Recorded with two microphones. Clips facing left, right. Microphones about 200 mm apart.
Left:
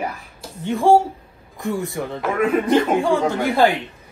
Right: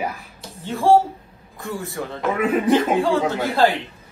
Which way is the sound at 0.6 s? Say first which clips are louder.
Left 1 dB; 15° left (ahead or behind).